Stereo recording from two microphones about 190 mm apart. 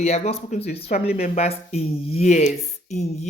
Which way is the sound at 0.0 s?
35° left (ahead or behind).